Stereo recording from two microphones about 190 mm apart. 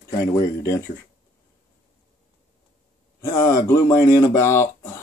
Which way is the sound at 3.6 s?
15° left (ahead or behind).